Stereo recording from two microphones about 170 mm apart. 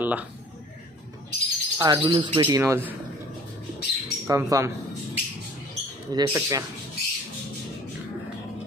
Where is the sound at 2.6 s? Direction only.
10° right (ahead or behind).